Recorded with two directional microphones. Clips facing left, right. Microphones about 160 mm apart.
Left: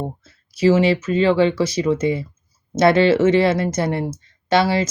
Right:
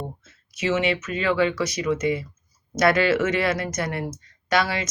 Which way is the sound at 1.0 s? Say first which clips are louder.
Left 6 dB; 30° left (ahead or behind).